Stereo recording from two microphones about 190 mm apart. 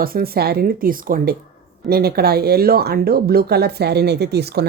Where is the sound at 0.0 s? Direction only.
50° right (ahead or behind).